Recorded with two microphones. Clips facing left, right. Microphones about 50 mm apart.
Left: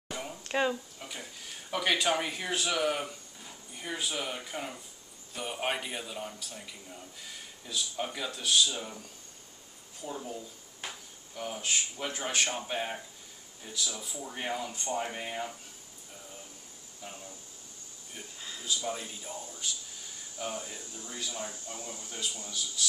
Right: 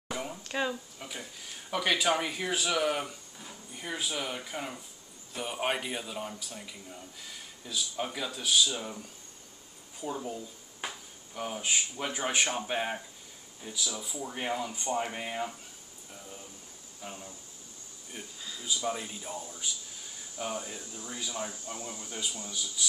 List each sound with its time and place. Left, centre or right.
0.1 s a sound: centre
0.5 s speech: centre
0.9 s a sound: centre
1.7 s speech: centre
10.0 s speech: centre
17.0 s speech: centre
18.6 s speech: centre